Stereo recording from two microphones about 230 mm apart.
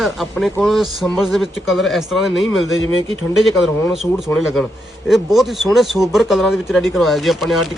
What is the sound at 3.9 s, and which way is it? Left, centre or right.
Speech, centre.